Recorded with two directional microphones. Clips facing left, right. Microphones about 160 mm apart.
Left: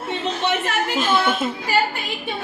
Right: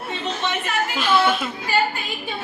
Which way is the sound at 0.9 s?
45° left (ahead or behind).